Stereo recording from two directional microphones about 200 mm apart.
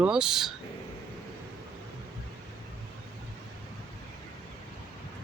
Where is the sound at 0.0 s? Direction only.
5° right (ahead or behind).